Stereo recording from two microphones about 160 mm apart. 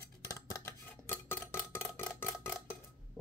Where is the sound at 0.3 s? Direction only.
20° left (ahead or behind).